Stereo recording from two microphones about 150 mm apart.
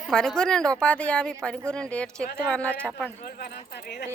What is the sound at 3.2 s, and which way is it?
Speech, 90° left.